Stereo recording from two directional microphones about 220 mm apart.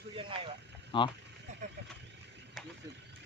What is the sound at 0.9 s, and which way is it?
Speech, 20° left (ahead or behind).